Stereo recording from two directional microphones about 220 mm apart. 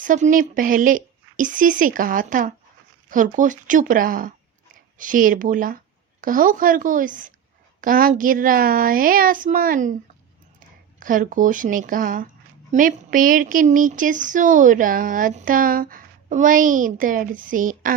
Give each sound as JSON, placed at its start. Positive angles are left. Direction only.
{"t": 0.0, "sound": "speech", "side_deg": -35}
{"t": 11.0, "sound": "speech", "side_deg": -35}